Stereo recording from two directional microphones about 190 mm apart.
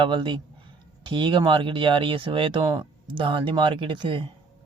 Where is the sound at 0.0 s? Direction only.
25° right (ahead or behind).